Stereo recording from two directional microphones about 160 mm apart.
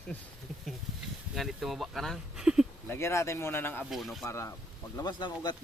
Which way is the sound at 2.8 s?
15° left (ahead or behind).